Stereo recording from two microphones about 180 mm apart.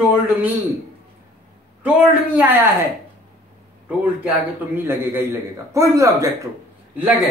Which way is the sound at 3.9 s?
10° right (ahead or behind).